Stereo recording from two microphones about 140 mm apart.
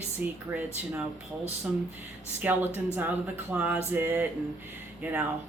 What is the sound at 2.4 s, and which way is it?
Speech, 15° right (ahead or behind).